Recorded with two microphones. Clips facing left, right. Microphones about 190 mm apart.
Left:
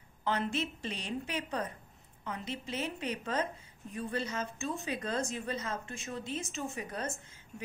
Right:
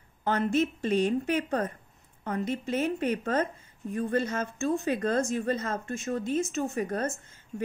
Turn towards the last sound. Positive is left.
turn(degrees=-45)  # may be behind; listen again after turning